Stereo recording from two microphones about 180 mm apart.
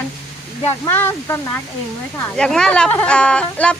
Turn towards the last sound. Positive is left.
turn(degrees=5)  # may be behind; listen again after turning